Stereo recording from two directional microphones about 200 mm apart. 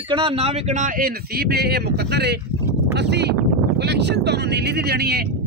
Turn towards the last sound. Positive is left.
turn(degrees=-55)  # may be behind; listen again after turning